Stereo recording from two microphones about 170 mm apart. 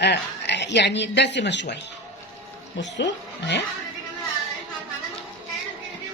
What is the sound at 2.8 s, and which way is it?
Speech, 90° left.